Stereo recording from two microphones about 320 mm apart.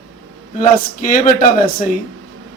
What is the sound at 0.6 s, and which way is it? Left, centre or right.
Speech, left.